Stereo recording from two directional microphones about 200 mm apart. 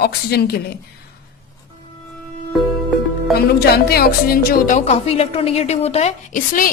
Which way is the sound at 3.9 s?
50° left (ahead or behind).